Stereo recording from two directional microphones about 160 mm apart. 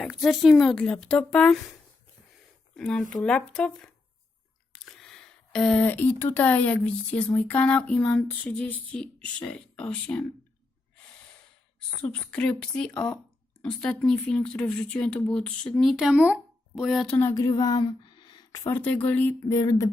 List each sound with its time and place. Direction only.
0.0 s speech: centre (ahead or behind)
12.0 s speech: 10° left (ahead or behind)
17.2 s a woman's voice: 20° left (ahead or behind)